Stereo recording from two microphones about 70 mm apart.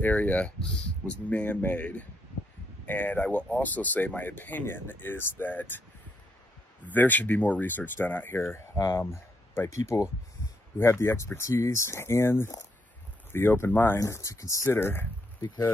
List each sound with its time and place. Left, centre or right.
0.0 s speech: left
6.8 s speech: left
8.7 s speech: left
9.7 s speech: left
10.8 s speech: left
13.9 s speech: left